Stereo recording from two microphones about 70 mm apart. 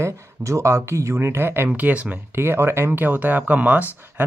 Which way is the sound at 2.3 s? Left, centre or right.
Right.